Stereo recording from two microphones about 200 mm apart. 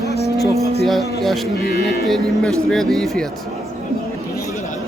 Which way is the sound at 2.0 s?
Centre (ahead or behind).